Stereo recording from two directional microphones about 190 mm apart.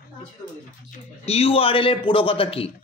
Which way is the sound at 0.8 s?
35° left (ahead or behind).